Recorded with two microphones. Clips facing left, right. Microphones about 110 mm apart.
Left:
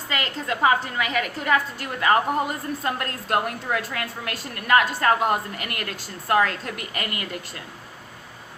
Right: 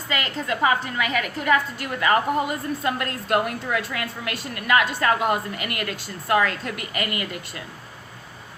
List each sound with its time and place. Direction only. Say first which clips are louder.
0.1 s a woman's voice: right 1 dB; 35° left (ahead or behind)